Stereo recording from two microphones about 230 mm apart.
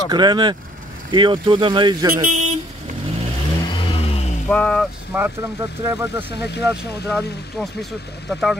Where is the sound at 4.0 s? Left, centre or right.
Left.